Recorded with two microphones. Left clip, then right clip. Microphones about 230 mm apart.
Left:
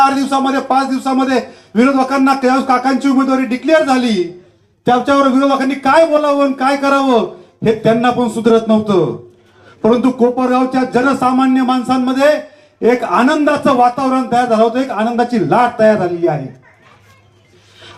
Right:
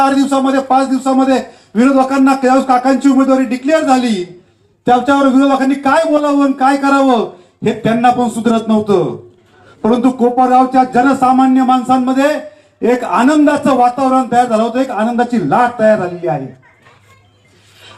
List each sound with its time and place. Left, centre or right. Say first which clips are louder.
0.0 s a man's voice: even; left